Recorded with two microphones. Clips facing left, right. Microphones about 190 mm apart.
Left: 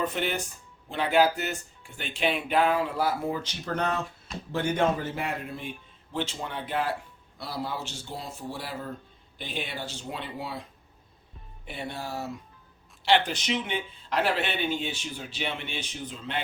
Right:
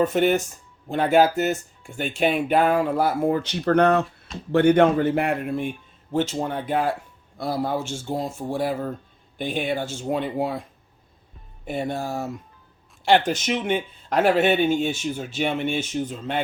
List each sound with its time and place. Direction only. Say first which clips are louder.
0.0 s a man's voice: right 10 dB; 45° right (ahead or behind)
11.6 s speech: right 9 dB; 45° right (ahead or behind)